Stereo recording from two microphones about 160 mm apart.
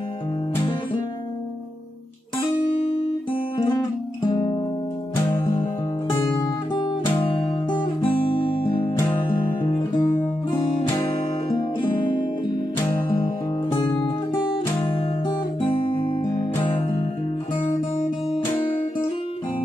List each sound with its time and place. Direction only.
4.3 s music: 30° left (ahead or behind)
6.2 s music: 25° left (ahead or behind)
7.7 s guitar: 30° left (ahead or behind)
9.2 s music: 30° left (ahead or behind)
9.7 s music: 15° left (ahead or behind)
13.7 s music: 25° left (ahead or behind)